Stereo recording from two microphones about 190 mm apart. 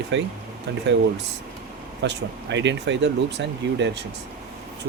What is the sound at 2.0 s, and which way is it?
Speech, 70° right (ahead or behind).